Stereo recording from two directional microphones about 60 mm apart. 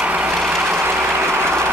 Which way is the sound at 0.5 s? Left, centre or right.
Right.